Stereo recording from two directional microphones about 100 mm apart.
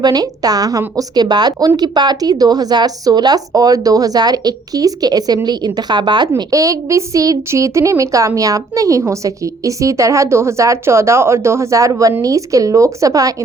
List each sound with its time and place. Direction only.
0.0 s speech: 40° right (ahead or behind)